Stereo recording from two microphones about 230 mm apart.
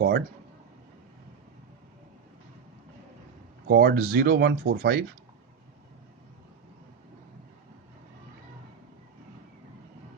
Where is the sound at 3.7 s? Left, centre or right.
Right.